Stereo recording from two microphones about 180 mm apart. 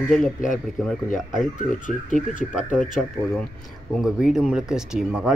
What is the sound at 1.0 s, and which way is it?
Speech, 45° left (ahead or behind).